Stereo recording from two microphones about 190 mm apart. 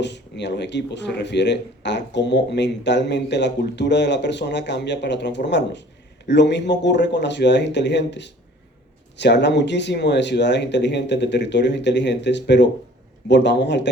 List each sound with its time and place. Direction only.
0.0 s speech: 65° left (ahead or behind)